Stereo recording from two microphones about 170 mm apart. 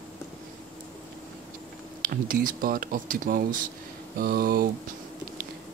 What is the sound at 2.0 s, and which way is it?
Speech, 55° right (ahead or behind).